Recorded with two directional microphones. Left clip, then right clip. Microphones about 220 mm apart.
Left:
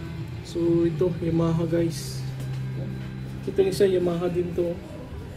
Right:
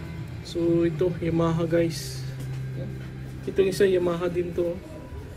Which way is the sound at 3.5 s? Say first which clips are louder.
Even; 5° left (ahead or behind).